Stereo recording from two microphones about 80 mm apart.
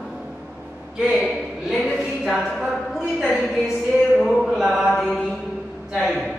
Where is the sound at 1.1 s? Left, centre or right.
Centre.